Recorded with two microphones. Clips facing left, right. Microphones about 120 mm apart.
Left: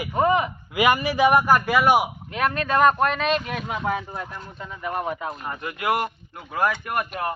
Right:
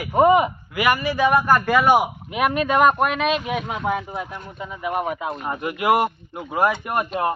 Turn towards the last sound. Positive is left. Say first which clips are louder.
# right 4 dB
turn(degrees=-25)  # may be behind; listen again after turning